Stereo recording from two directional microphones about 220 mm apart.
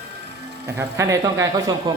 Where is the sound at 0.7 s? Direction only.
15° right (ahead or behind).